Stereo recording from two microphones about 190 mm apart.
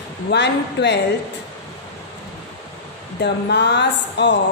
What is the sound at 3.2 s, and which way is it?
Speech, 60° left (ahead or behind).